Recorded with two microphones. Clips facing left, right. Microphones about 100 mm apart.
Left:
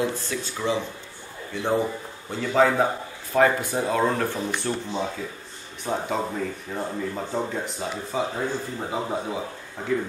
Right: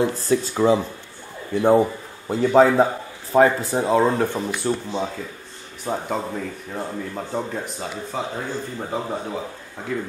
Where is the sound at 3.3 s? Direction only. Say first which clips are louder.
Right 4 dB; 25° right (ahead or behind).